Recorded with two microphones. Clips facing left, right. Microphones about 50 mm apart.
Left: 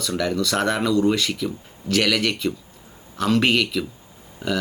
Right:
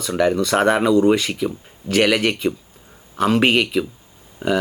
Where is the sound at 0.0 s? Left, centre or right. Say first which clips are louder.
Right 5 dB; right.